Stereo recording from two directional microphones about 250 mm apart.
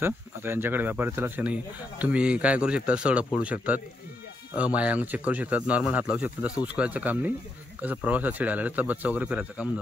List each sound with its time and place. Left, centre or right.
0.0 s speech: centre